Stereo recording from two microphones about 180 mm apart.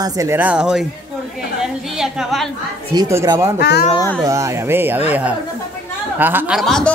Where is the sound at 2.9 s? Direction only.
20° right (ahead or behind).